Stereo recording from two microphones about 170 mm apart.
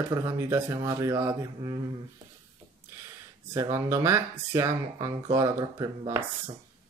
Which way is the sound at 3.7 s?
15° right (ahead or behind).